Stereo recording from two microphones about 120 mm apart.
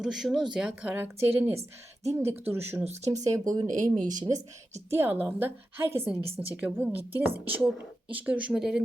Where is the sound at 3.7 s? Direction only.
90° right.